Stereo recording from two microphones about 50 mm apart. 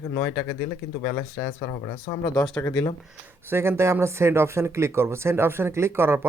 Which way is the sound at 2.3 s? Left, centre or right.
Centre.